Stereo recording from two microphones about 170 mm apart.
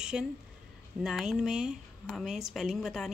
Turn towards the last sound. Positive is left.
turn(degrees=0)  # may be behind; listen again after turning